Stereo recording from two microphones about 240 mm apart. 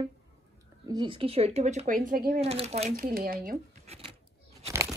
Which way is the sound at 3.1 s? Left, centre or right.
Right.